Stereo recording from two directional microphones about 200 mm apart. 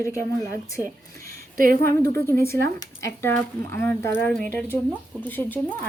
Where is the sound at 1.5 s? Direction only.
45° right (ahead or behind).